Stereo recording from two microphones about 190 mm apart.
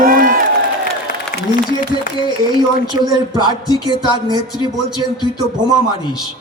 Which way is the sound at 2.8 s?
20° right (ahead or behind).